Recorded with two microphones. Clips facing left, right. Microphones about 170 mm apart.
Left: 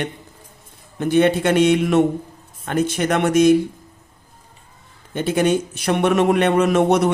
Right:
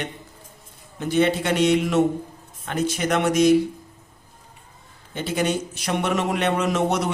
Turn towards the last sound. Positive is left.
turn(degrees=55)  # may be behind; listen again after turning